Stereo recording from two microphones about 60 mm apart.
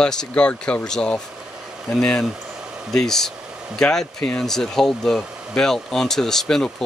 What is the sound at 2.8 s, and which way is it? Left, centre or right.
Speech, centre.